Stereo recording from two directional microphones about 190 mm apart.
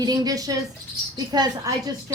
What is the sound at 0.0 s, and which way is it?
Speech, 20° right (ahead or behind).